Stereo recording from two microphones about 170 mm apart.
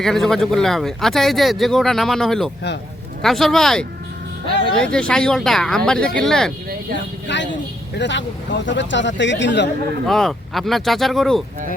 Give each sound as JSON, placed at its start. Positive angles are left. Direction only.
{"t": 0.0, "sound": "speech", "side_deg": 0}
{"t": 7.3, "sound": "speech", "side_deg": 90}
{"t": 10.1, "sound": "speech", "side_deg": 0}